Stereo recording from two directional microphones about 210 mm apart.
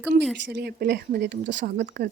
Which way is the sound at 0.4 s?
50° right (ahead or behind).